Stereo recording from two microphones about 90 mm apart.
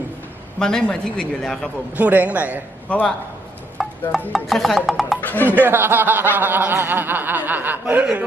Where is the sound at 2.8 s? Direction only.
15° left (ahead or behind).